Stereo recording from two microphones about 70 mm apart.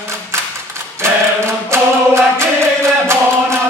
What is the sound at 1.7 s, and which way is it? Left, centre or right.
Music, right.